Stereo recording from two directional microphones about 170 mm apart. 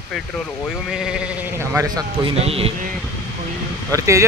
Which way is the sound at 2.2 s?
35° right (ahead or behind).